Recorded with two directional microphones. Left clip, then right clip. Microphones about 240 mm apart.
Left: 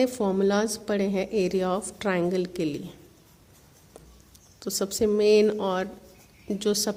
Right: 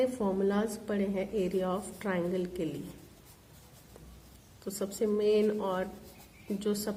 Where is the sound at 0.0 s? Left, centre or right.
Left.